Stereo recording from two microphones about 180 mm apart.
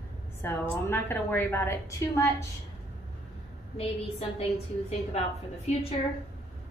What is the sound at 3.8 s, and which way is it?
Speech, 35° left (ahead or behind).